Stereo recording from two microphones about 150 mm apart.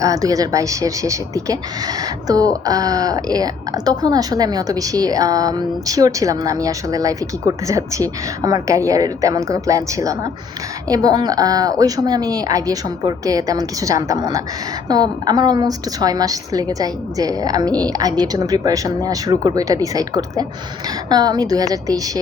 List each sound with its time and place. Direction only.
0.0 s speech: 25° right (ahead or behind)